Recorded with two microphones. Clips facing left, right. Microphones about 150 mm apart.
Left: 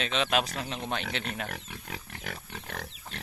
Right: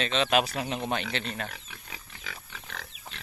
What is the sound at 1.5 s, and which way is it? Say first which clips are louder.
Pig: left 6 dB; 60° left (ahead or behind).